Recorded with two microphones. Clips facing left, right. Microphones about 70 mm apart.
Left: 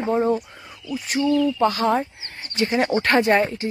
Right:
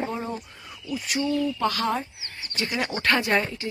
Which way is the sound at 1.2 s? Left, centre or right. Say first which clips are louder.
Left 7 dB; left.